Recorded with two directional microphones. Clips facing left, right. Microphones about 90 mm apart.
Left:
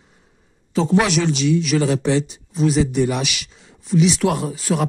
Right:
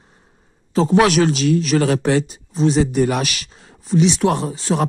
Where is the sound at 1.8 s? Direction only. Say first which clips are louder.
Right 2 dB; 60° right (ahead or behind).